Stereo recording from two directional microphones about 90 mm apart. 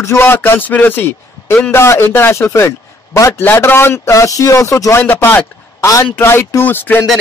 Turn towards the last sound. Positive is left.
turn(degrees=20)  # may be behind; listen again after turning